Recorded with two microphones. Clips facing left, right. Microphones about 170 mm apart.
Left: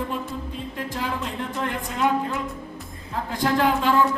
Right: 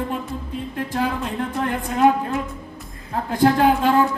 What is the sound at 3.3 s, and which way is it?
Speech, 55° right (ahead or behind).